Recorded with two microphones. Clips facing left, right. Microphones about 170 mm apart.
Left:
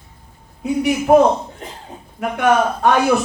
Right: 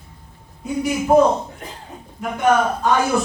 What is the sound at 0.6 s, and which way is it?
Speech, 70° left (ahead or behind).